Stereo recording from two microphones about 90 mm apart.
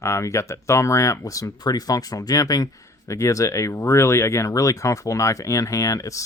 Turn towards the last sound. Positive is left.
turn(degrees=35)  # may be behind; listen again after turning